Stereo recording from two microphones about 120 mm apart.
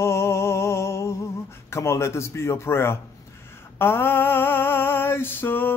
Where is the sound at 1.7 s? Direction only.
20° left (ahead or behind).